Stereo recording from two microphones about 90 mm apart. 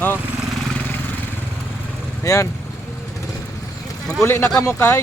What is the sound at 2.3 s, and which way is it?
Speech, 40° left (ahead or behind).